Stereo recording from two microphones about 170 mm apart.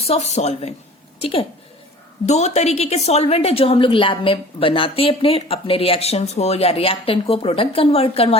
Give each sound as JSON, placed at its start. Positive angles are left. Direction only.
{"t": 0.0, "sound": "a woman's voice", "side_deg": 40}